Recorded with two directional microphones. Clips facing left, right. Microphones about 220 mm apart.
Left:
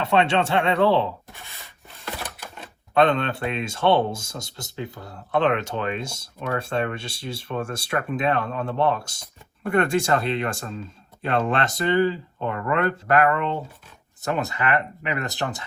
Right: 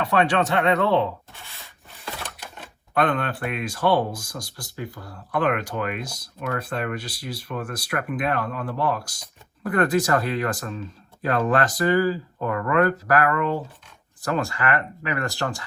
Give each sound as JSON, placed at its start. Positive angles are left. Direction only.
{"t": 0.0, "sound": "speech", "side_deg": 25}
{"t": 1.3, "sound": "a sound", "side_deg": 15}
{"t": 2.9, "sound": "speech", "side_deg": 25}